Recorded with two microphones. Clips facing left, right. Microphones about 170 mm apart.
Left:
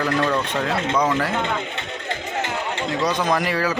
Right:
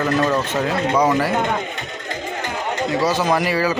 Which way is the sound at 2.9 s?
5° right (ahead or behind).